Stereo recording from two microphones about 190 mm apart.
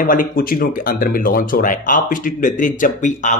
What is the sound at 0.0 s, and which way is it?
Speech, 50° left (ahead or behind).